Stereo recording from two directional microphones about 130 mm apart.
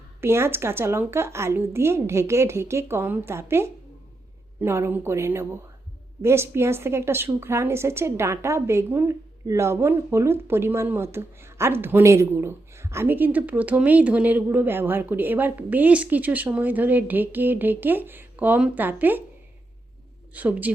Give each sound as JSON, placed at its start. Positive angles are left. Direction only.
{"t": 0.2, "sound": "a woman's voice", "side_deg": -20}
{"t": 20.3, "sound": "a woman's voice", "side_deg": -10}